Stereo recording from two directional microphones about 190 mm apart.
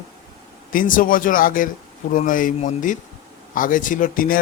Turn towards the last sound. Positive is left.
turn(degrees=45)  # may be behind; listen again after turning